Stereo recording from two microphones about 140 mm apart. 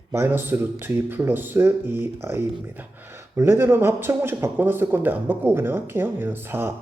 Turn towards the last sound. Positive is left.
turn(degrees=-15)  # may be behind; listen again after turning